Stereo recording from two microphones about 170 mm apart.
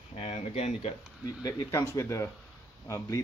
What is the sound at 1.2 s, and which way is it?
Speech, 20° left (ahead or behind).